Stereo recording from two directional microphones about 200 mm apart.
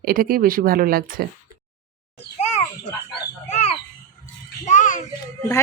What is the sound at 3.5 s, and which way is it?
Bird, 30° left (ahead or behind).